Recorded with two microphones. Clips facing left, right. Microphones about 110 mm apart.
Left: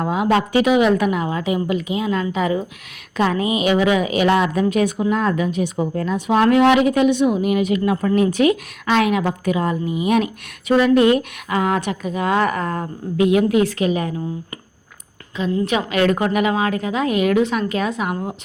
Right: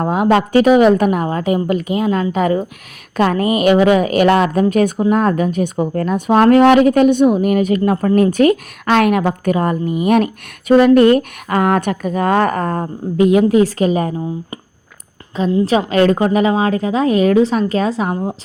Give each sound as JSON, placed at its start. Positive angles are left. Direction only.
{"t": 0.0, "sound": "a woman's voice", "side_deg": -45}
{"t": 15.3, "sound": "a woman's voice", "side_deg": -40}